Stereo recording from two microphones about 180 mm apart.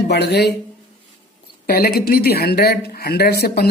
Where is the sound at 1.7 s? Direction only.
60° left (ahead or behind).